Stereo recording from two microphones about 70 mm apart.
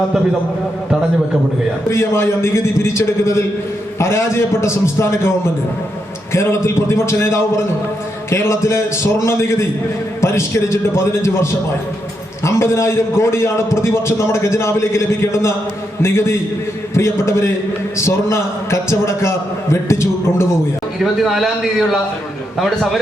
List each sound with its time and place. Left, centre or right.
1.9 s a man's voice: left
6.3 s a man's voice: left
12.5 s a man's voice: left
21.0 s a man's voice: centre